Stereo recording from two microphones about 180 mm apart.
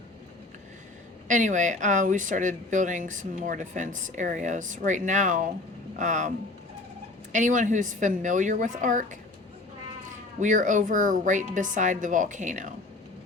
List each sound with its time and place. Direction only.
1.3 s speech: 45° right (ahead or behind)
7.3 s speech: 45° right (ahead or behind)
10.4 s speech: 45° right (ahead or behind)